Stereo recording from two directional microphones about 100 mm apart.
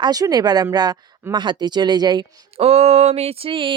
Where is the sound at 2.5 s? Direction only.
90° right; by 3.7 s 60° right (ahead or behind).